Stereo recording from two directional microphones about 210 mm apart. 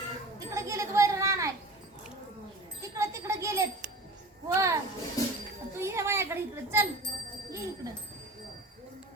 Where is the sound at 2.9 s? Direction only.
15° right (ahead or behind).